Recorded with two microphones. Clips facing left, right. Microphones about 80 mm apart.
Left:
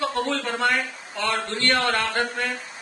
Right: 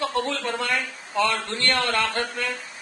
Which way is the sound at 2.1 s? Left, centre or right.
Left.